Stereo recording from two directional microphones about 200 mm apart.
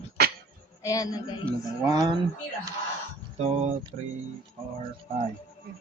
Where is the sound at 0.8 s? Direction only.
20° left (ahead or behind).